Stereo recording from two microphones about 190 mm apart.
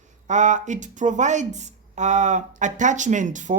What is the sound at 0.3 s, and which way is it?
Speech, 40° right (ahead or behind).